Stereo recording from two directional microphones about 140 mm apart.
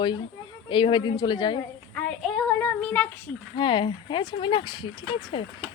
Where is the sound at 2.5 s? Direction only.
10° left (ahead or behind).